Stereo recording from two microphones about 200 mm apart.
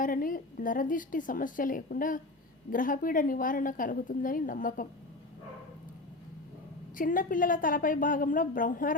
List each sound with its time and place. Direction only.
0.0 s a woman's voice: 45° left (ahead or behind)
6.9 s a woman's voice: 45° left (ahead or behind)